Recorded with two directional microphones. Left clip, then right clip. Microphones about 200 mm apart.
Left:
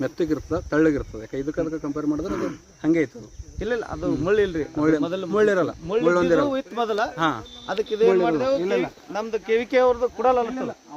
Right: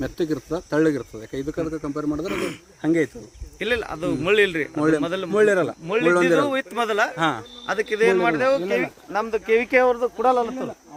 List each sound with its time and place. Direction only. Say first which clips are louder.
0.0 s speech: left 1 dB; 50° right (ahead or behind)
2.2 s speech: right 1 dB; 15° right (ahead or behind)
2.8 s speech: even; 35° right (ahead or behind)
3.6 s speech: right 2 dB; 10° right (ahead or behind)
4.8 s speech: even; 40° right (ahead or behind)
5.0 s speech: right 1 dB; 10° right (ahead or behind)
5.3 s speech: right 2 dB; 35° right (ahead or behind)
6.5 s speech: right 2 dB; 10° right (ahead or behind)
6.8 s speech: right 1 dB; 35° right (ahead or behind)
7.9 s speech: even; 10° right (ahead or behind); by 10.1 s 35° right (ahead or behind)
10.2 s speech: right 1 dB; 50° right (ahead or behind)